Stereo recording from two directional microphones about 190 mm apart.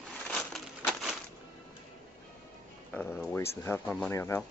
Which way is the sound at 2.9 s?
5° left (ahead or behind).